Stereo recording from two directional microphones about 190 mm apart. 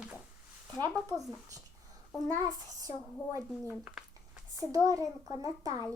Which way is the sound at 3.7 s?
5° right (ahead or behind).